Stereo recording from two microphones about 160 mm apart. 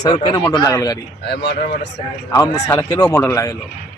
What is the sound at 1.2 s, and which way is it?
Speech, 90° left.